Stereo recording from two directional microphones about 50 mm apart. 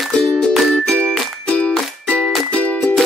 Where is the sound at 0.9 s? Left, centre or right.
Left.